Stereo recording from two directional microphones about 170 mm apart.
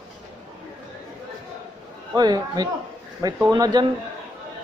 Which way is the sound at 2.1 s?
25° right (ahead or behind).